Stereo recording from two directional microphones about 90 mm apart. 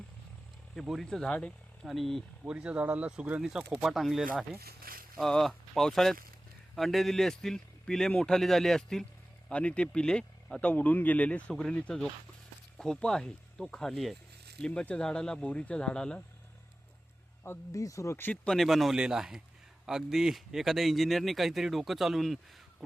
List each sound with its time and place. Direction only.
0.8 s speech: centre (ahead or behind)
1.8 s a man's voice: centre (ahead or behind)
2.5 s a man's voice: 10° right (ahead or behind)
14.6 s speech: 10° left (ahead or behind)
17.7 s speech: 40° left (ahead or behind)
18.4 s a man's voice: centre (ahead or behind)